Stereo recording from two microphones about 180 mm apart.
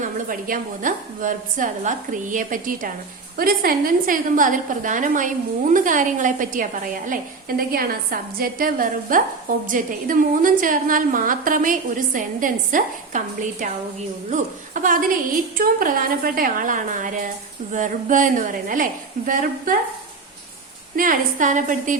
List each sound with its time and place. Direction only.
0.0 s a woman's voice: 50° right (ahead or behind)
20.9 s a woman's voice: 50° right (ahead or behind)